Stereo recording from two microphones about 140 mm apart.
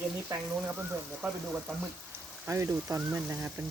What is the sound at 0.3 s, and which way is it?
Speech, 15° right (ahead or behind).